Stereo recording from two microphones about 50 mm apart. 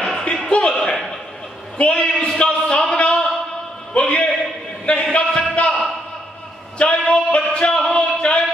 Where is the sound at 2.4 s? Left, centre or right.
Left.